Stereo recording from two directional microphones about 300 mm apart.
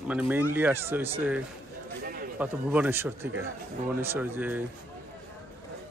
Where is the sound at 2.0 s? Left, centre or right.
Right.